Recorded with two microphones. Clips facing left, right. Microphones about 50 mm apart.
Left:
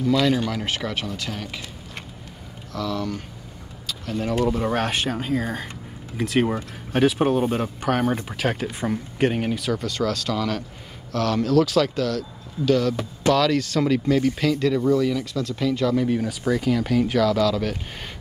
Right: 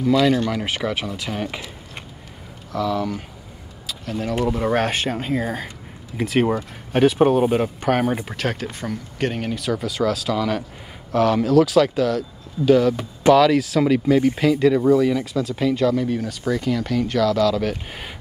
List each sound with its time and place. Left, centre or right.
0.0 s speech: centre
2.7 s speech: centre
3.8 s a sound: centre
4.5 s speech: centre
8.4 s speech: centre